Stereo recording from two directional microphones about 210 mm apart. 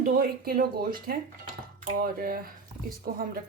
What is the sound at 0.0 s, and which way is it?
Speech, 45° right (ahead or behind).